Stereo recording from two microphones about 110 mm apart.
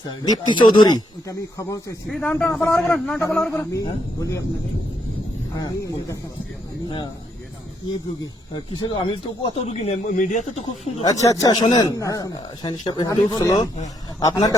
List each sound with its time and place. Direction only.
0.3 s speech: 45° left (ahead or behind)
2.0 s a man's voice: 5° left (ahead or behind)
3.5 s a man's voice: 30° left (ahead or behind)
5.5 s speech: 35° left (ahead or behind)
7.9 s speech: 45° left (ahead or behind)
9.6 s speech: 80° left
11.0 s speech: 30° left (ahead or behind)